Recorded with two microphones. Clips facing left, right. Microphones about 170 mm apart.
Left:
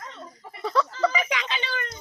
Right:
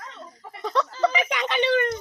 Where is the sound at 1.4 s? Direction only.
65° right (ahead or behind).